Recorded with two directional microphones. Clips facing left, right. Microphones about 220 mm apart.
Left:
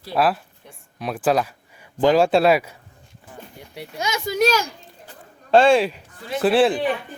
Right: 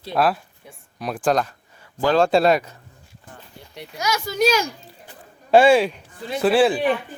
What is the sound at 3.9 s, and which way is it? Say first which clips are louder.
Speech: right 1 dB; 25° left (ahead or behind).